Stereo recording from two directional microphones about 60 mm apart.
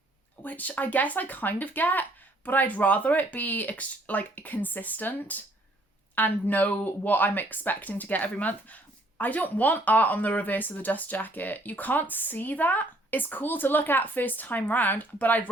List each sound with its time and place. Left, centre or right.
0.4 s speech: left